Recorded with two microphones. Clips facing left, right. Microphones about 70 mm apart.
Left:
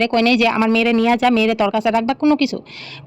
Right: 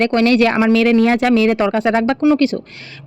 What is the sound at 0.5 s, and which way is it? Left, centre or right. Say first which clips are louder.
Speech: right 2 dB; right.